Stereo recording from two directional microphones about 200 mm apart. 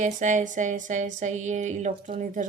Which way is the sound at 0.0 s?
40° right (ahead or behind).